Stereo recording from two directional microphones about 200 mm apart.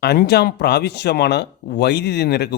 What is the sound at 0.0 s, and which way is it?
Speech, 55° left (ahead or behind).